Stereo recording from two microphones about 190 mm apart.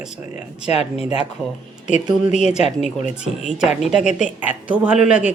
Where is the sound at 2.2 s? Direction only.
35° left (ahead or behind).